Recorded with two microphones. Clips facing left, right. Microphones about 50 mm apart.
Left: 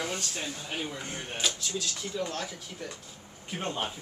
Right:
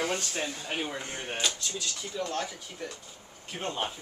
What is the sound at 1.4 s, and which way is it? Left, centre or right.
Speech, centre.